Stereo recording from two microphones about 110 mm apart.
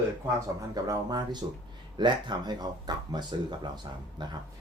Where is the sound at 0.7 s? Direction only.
35° right (ahead or behind).